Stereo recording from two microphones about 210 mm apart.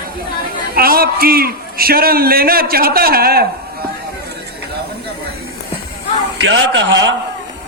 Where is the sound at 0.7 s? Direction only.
45° right (ahead or behind).